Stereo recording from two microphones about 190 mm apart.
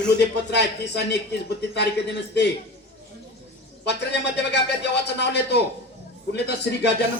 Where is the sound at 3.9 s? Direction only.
65° left (ahead or behind).